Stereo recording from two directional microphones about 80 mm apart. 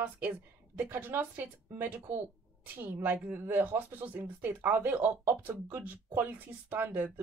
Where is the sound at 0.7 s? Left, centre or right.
Right.